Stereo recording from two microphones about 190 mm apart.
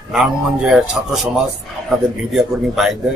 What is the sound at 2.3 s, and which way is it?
Speech, centre (ahead or behind).